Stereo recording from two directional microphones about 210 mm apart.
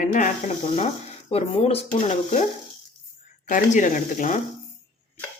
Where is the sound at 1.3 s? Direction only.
30° left (ahead or behind).